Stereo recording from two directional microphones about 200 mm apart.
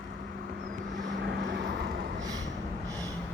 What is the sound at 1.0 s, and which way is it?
Vehicle, 55° right (ahead or behind).